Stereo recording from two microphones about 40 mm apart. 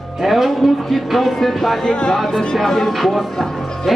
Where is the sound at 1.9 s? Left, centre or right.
Left.